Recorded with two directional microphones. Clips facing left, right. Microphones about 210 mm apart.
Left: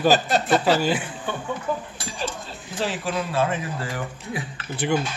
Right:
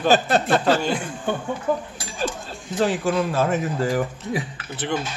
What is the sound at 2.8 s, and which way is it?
A man's voice, 45° right (ahead or behind).